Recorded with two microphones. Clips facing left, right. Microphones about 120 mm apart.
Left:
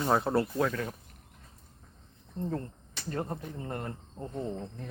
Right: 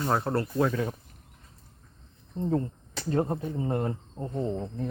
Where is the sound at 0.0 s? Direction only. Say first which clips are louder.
Even; centre (ahead or behind).